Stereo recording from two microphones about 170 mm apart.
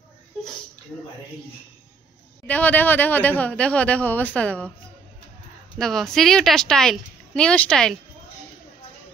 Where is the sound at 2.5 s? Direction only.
10° left (ahead or behind).